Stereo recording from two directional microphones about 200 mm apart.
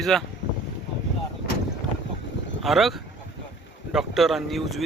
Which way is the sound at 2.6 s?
Centre (ahead or behind).